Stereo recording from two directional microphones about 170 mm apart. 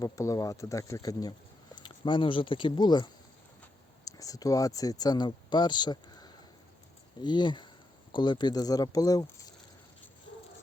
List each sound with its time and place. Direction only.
0.0 s speech: 20° left (ahead or behind)